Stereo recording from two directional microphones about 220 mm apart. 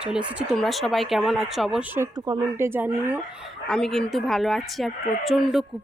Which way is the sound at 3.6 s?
Centre (ahead or behind).